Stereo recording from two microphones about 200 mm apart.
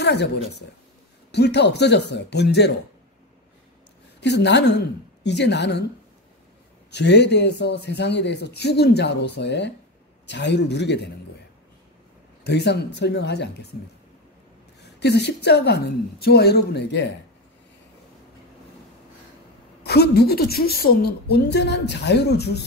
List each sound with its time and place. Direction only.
0.0 s a man's voice: 55° left (ahead or behind)
4.2 s a man's voice: 60° left (ahead or behind)
6.9 s a man's voice: 60° left (ahead or behind)
12.4 s a man's voice: 55° left (ahead or behind)
15.0 s a man's voice: 55° left (ahead or behind)
19.8 s a man's voice: 55° left (ahead or behind)